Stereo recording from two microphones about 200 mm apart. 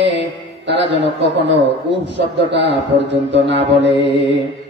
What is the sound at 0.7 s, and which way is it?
A man's voice, 60° right (ahead or behind).